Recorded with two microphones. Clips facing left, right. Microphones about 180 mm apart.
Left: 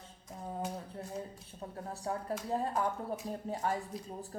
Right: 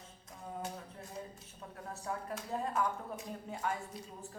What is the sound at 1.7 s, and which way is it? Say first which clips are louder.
Speech: left 3 dB; 35° left (ahead or behind).